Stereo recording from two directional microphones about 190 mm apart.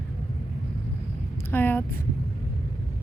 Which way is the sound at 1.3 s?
10° left (ahead or behind).